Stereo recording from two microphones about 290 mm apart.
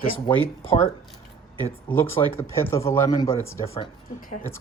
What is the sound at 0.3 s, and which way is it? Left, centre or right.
Speech, centre.